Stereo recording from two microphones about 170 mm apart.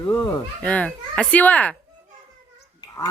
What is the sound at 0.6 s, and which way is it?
Speech, 10° left (ahead or behind).